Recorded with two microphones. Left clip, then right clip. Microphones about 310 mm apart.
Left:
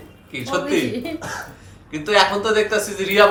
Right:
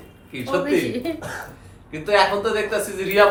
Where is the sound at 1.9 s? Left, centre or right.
Left.